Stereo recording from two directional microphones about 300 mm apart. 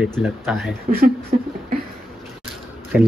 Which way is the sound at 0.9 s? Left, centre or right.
Right.